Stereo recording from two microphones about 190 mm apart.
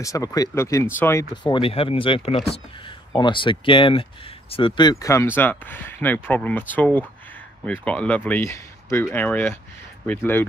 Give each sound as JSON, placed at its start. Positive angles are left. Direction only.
{"t": 0.0, "sound": "speech", "side_deg": 15}
{"t": 1.3, "sound": "speech", "side_deg": 25}